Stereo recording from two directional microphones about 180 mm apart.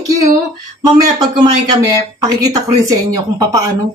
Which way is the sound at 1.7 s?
20° right (ahead or behind).